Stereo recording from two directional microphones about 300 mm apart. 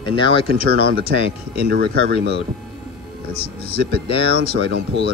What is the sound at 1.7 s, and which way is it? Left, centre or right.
Speech, right.